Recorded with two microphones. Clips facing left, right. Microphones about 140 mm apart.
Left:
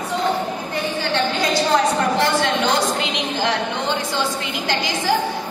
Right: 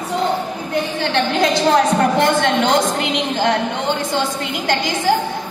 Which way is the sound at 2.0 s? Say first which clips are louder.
Right 3 dB; 50° right (ahead or behind).